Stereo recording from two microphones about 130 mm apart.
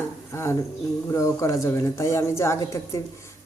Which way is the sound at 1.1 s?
25° left (ahead or behind).